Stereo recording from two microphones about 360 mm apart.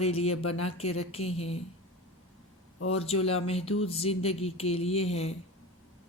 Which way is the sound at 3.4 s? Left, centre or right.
Centre.